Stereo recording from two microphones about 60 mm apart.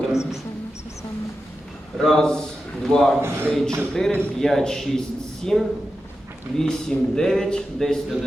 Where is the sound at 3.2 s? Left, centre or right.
Right.